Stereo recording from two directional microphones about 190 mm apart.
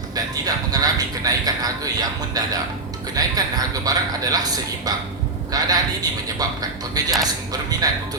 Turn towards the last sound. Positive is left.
turn(degrees=-20)  # may be behind; listen again after turning